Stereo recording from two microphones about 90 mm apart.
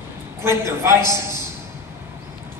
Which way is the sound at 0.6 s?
30° right (ahead or behind).